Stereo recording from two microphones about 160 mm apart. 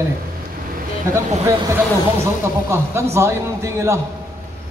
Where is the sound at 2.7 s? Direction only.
15° right (ahead or behind).